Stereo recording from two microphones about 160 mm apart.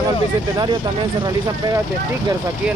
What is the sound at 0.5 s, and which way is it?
Speech, 25° right (ahead or behind).